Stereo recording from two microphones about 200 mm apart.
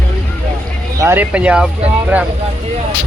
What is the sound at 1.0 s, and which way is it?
Speech, 10° right (ahead or behind).